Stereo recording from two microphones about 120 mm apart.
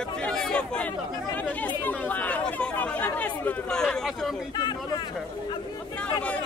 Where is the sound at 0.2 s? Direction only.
5° left (ahead or behind).